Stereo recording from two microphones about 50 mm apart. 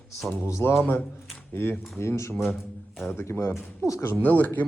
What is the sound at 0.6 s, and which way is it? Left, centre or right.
Speech, left.